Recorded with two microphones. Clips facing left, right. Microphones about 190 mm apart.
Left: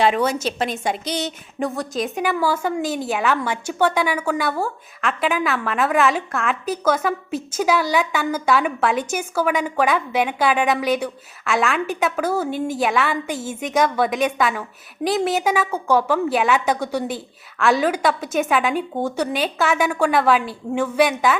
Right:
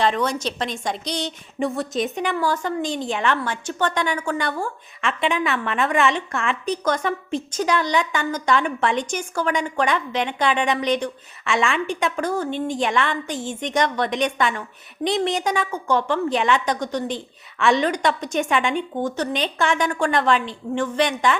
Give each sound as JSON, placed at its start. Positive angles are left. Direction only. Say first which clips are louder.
{"t": 0.0, "sound": "a woman's voice", "louder": "left 3 dB", "side_deg": 5}